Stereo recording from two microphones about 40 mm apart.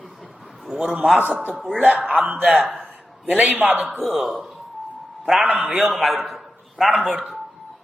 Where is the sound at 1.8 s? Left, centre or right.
Right.